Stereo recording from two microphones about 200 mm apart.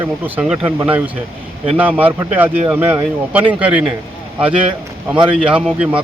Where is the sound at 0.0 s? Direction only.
10° right (ahead or behind).